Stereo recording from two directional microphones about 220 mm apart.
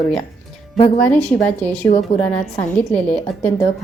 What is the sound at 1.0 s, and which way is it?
Speech, 5° left (ahead or behind).